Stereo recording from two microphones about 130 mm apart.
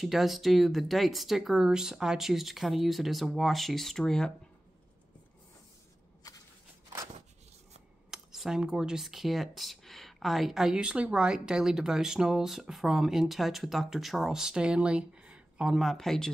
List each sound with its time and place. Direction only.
0.0 s speech: centre (ahead or behind)
6.2 s a sound: 30° left (ahead or behind)
8.1 s speech: 5° right (ahead or behind)